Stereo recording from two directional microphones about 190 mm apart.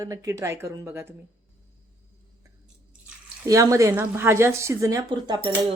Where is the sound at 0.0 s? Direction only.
15° right (ahead or behind).